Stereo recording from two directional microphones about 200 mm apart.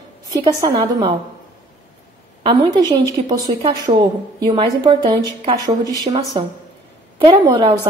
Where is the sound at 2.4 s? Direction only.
25° right (ahead or behind).